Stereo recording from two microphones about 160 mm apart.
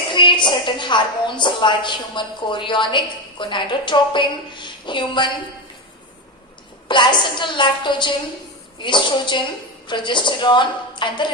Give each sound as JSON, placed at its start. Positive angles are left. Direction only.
{"t": 0.1, "sound": "a woman's voice", "side_deg": 30}
{"t": 6.8, "sound": "a woman's voice", "side_deg": 30}